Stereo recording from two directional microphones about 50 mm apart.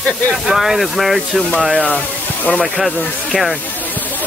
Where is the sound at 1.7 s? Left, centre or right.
Left.